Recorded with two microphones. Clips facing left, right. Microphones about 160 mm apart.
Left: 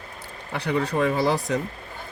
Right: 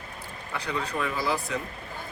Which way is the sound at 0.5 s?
65° left (ahead or behind).